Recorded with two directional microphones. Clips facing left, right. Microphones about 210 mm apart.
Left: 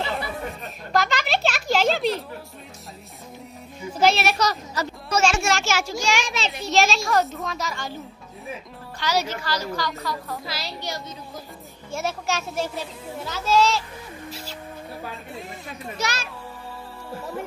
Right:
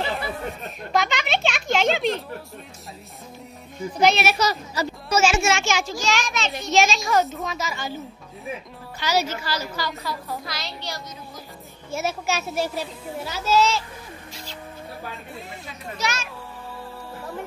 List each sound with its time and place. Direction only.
0.9 s a sound: centre (ahead or behind)
3.9 s a child's voice: centre (ahead or behind)
6.2 s a child's voice: 30° left (ahead or behind)
6.7 s a child's voice: centre (ahead or behind)
9.0 s a child's voice: 5° right (ahead or behind)
11.9 s a child's voice: 5° right (ahead or behind)
14.3 s music: 5° left (ahead or behind)
16.0 s a child's voice: 35° left (ahead or behind)